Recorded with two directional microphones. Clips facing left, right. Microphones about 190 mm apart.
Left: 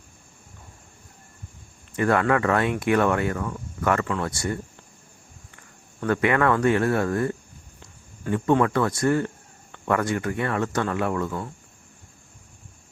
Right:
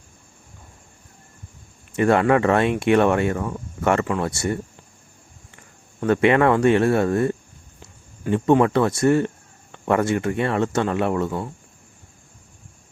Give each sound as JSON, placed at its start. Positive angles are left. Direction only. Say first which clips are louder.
{"t": 2.0, "sound": "speech", "louder": "right 4 dB", "side_deg": -20}
{"t": 6.0, "sound": "speech", "louder": "right 5 dB", "side_deg": -25}